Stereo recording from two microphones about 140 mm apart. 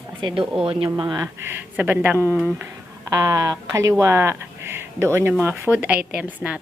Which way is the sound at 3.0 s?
25° right (ahead or behind).